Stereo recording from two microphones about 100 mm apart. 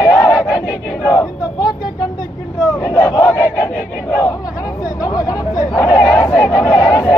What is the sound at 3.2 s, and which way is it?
Battle cry, 25° left (ahead or behind).